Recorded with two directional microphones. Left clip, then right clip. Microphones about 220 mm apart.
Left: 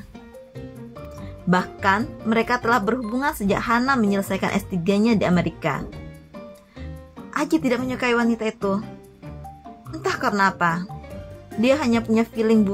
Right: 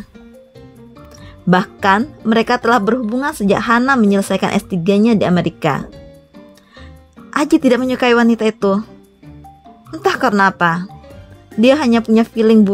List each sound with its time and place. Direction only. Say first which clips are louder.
1.5 s speech: right 7 dB; 40° right (ahead or behind)
7.2 s speech: right 9 dB; 35° right (ahead or behind)
9.8 s speech: right 8 dB; 30° right (ahead or behind)